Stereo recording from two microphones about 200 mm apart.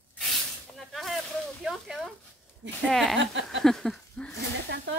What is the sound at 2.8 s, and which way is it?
Speech, centre (ahead or behind).